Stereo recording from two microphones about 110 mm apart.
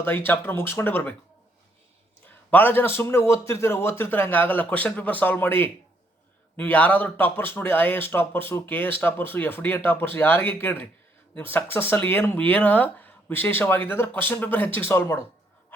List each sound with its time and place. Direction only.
0.0 s speech: 20° left (ahead or behind)
2.2 s speech: 15° left (ahead or behind)